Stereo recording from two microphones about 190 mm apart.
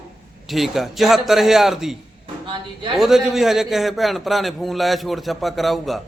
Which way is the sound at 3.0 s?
Centre (ahead or behind).